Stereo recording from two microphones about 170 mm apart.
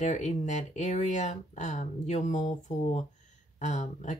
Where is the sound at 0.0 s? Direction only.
45° left (ahead or behind).